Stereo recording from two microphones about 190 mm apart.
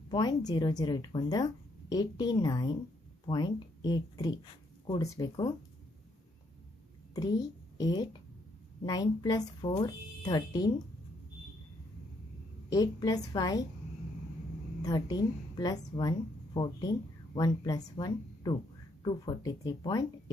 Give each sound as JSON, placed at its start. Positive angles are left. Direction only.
{"t": 0.1, "sound": "speech", "side_deg": 20}
{"t": 7.1, "sound": "speech", "side_deg": 20}
{"t": 12.7, "sound": "speech", "side_deg": 20}
{"t": 14.8, "sound": "a woman's voice", "side_deg": 20}
{"t": 17.3, "sound": "speech", "side_deg": 20}